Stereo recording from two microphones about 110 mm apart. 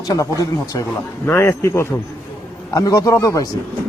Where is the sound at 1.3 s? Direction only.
25° left (ahead or behind).